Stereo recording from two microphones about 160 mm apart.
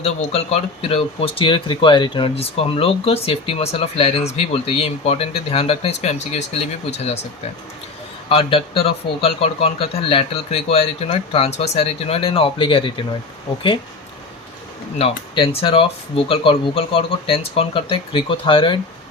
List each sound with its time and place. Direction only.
0.0 s speech: 40° left (ahead or behind)
8.3 s speech: 35° left (ahead or behind)
14.9 s speech: 35° left (ahead or behind)